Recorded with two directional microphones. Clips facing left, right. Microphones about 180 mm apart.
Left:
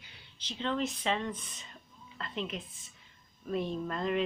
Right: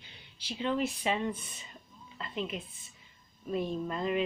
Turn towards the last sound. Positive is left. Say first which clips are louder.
# even
turn(degrees=-5)  # may be behind; listen again after turning